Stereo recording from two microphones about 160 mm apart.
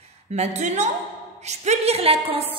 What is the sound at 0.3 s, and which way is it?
A woman's voice, 45° right (ahead or behind).